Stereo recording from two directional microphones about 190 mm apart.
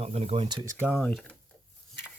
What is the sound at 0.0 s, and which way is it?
Speech, 35° right (ahead or behind).